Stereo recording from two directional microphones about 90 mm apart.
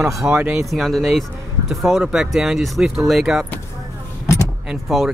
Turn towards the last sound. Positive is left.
turn(degrees=0)  # may be behind; listen again after turning